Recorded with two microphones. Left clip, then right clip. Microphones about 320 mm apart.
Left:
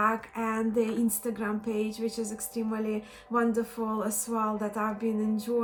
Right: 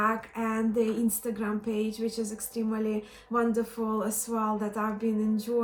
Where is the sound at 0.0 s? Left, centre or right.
Centre.